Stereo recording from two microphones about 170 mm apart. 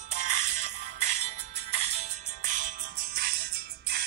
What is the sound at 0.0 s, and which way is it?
Music, 45° right (ahead or behind).